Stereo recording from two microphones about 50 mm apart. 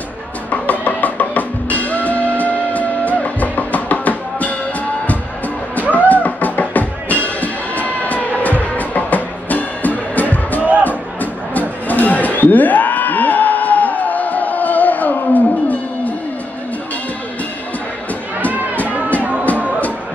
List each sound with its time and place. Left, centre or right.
0.5 s music: left
18.5 s music: right